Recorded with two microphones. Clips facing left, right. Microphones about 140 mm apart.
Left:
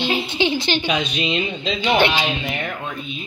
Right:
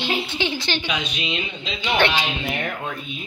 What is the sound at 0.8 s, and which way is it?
Speech, 35° left (ahead or behind).